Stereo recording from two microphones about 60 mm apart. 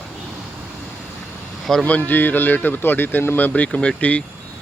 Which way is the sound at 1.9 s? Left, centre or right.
Left.